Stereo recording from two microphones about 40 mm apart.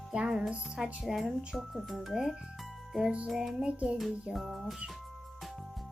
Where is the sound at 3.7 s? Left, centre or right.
Right.